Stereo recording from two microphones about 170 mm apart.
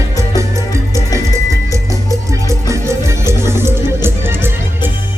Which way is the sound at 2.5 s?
15° right (ahead or behind).